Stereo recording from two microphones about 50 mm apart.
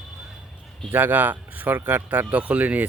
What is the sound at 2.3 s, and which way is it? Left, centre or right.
Speech, right.